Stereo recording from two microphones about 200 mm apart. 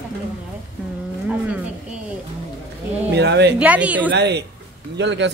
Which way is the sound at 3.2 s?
60° right (ahead or behind).